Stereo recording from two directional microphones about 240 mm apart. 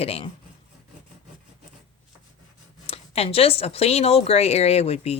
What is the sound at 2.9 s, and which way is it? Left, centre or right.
Speech, left.